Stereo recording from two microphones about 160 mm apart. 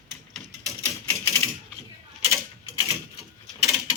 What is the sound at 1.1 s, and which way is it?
Typewriter, 20° left (ahead or behind).